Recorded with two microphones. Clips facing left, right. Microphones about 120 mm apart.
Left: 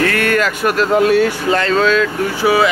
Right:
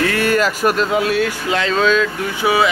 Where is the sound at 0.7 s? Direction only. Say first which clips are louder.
Left 4 dB; centre (ahead or behind).